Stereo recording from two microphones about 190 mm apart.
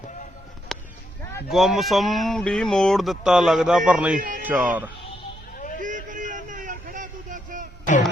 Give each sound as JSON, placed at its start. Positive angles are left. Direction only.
{"t": 0.7, "sound": "a sound", "side_deg": 0}
{"t": 1.5, "sound": "speech", "side_deg": 0}
{"t": 5.5, "sound": "vehicle", "side_deg": 45}
{"t": 5.8, "sound": "vehicle", "side_deg": -45}